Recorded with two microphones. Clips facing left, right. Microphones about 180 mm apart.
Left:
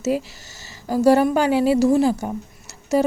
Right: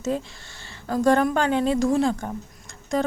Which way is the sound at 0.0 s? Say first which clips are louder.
Left 4 dB; 10° left (ahead or behind).